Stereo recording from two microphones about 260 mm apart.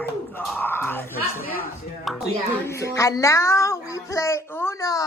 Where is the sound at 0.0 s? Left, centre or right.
Centre.